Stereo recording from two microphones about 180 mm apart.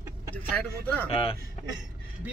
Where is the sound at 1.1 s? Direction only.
30° left (ahead or behind).